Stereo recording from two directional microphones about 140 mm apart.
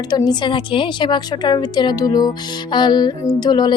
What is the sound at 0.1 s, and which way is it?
A woman's voice, 30° left (ahead or behind).